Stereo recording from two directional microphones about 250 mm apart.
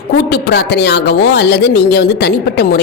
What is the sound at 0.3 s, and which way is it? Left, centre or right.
Speech, left.